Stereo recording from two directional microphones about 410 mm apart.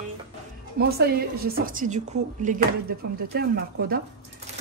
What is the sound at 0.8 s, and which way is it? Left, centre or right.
A woman's voice, right.